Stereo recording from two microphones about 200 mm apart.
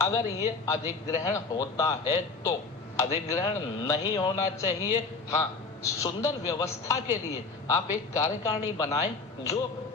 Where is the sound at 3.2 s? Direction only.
15° left (ahead or behind).